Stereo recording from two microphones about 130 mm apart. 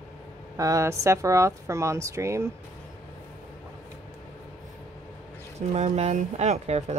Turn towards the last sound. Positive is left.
turn(degrees=-55)  # may be behind; listen again after turning